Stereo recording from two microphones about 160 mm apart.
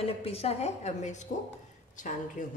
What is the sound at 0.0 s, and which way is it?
A woman's voice, 40° left (ahead or behind).